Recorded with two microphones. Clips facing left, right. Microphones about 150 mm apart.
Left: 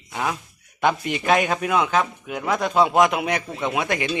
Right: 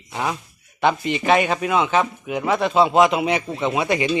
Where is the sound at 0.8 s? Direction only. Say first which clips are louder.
Right 2 dB; centre (ahead or behind).